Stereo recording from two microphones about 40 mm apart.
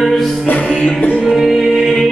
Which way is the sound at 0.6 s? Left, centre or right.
Left.